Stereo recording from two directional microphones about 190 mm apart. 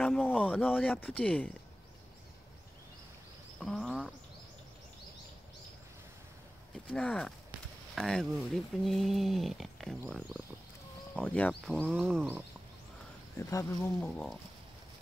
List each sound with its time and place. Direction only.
0.0 s a sound: 5° left (ahead or behind)
0.9 s speech: 10° left (ahead or behind)
3.5 s wild animals: centre (ahead or behind)
6.9 s speech: 5° left (ahead or behind)
13.4 s speech: 15° left (ahead or behind)